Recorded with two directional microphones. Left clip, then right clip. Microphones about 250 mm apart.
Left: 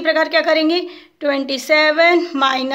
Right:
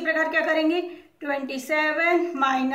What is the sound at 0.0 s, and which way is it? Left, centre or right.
A woman's voice, left.